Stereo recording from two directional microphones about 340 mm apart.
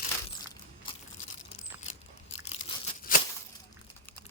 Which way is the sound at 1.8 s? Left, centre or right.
Centre.